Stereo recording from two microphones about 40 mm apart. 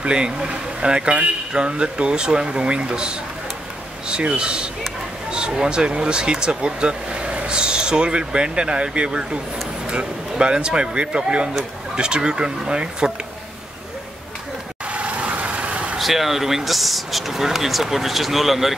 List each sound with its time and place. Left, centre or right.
0.0 s speech: right
10.4 s speech: right
14.9 s vehicle: right
16.0 s speech: centre